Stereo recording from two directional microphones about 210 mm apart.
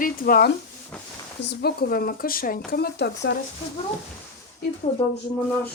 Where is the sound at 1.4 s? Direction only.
50° left (ahead or behind).